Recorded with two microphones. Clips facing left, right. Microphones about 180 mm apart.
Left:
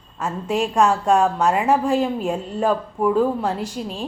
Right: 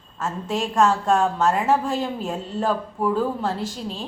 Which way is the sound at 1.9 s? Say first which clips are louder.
Left 5 dB; 10° left (ahead or behind).